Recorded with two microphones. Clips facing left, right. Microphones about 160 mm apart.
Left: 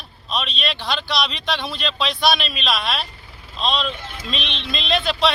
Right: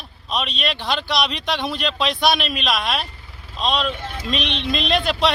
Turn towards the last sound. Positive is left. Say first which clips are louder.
# right 1 dB
turn(degrees=-15)  # may be behind; listen again after turning